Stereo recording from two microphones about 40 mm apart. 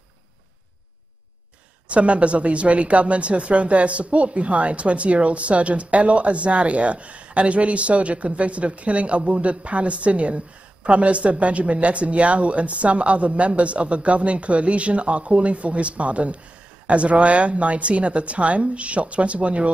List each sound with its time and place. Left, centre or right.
1.9 s a woman's voice: right